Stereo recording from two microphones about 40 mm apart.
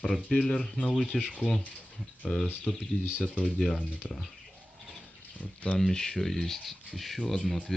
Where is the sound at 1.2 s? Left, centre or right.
Right.